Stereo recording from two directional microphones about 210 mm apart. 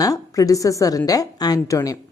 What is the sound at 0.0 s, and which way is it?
A woman's voice, 15° left (ahead or behind).